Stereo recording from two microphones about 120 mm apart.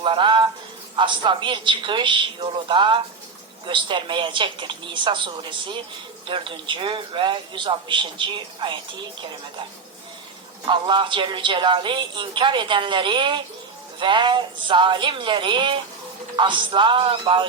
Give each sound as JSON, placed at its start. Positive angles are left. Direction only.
{"t": 0.0, "sound": "a sound", "side_deg": -45}
{"t": 0.9, "sound": "speech", "side_deg": -40}
{"t": 10.7, "sound": "speech", "side_deg": -40}